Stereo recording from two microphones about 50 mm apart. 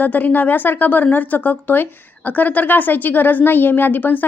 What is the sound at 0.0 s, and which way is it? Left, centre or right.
Speech, left.